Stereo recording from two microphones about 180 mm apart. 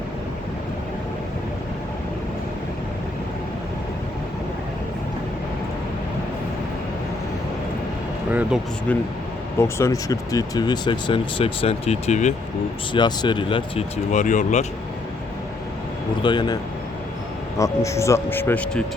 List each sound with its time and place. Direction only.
8.3 s a sound: 10° right (ahead or behind)
8.9 s speech: 10° left (ahead or behind); by 12.3 s 40° left (ahead or behind)
12.9 s speech: 25° left (ahead or behind)
14.1 s speech: 45° left (ahead or behind)
16.2 s speech: 25° left (ahead or behind)
17.6 s speech: 15° left (ahead or behind)